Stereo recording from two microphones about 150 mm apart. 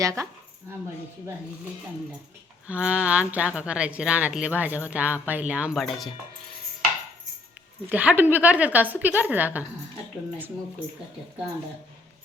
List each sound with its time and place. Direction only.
0.0 s speech: 20° right (ahead or behind)
2.6 s a woman's voice: 5° right (ahead or behind)
7.9 s a woman's voice: 10° right (ahead or behind)